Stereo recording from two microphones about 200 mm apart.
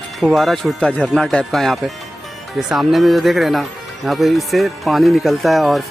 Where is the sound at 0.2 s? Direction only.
Centre (ahead or behind).